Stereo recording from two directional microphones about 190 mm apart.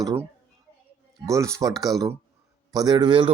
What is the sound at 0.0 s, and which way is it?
Speech, 20° right (ahead or behind).